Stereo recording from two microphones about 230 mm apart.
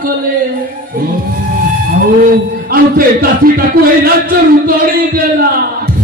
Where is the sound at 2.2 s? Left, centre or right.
Right.